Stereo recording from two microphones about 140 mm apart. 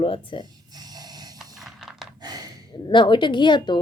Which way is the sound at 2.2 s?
25° right (ahead or behind).